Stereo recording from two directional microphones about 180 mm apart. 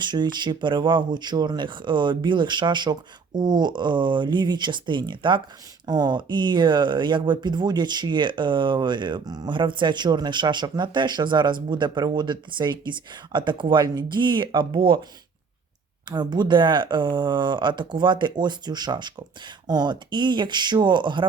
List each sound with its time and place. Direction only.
0.0 s speech: 25° right (ahead or behind)
16.0 s speech: 25° right (ahead or behind)